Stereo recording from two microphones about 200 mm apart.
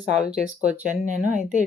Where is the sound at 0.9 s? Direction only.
35° right (ahead or behind).